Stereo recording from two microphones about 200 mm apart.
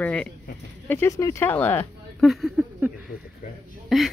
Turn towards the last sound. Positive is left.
turn(degrees=0)  # may be behind; listen again after turning